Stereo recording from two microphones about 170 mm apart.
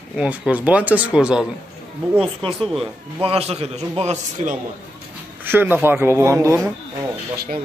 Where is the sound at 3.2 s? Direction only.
35° right (ahead or behind).